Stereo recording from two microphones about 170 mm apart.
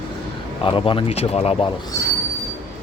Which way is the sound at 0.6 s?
30° left (ahead or behind).